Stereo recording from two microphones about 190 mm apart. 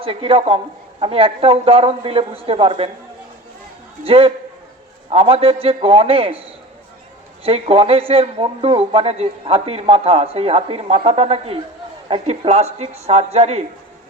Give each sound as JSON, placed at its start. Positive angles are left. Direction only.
{"t": 0.0, "sound": "speech", "side_deg": -30}
{"t": 4.0, "sound": "speech", "side_deg": -30}
{"t": 7.4, "sound": "speech", "side_deg": -30}